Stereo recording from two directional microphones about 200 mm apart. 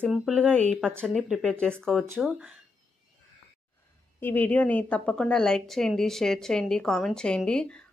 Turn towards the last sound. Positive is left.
turn(degrees=5)  # may be behind; listen again after turning